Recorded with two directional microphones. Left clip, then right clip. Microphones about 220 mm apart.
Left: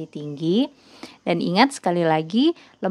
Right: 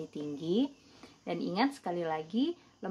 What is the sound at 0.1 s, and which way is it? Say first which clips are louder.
Speech: left 10 dB; 35° left (ahead or behind).